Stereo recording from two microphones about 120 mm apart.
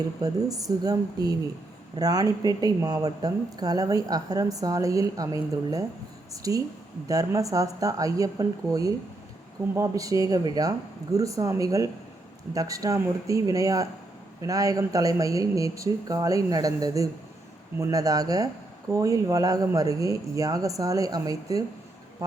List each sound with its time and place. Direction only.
0.2 s speech: 30° right (ahead or behind)